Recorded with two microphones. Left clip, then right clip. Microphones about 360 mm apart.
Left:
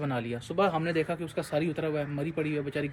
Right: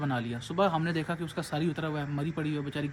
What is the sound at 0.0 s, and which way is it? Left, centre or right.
Speech, centre.